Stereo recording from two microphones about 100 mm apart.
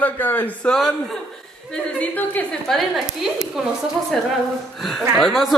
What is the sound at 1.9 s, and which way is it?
Speech, 15° left (ahead or behind).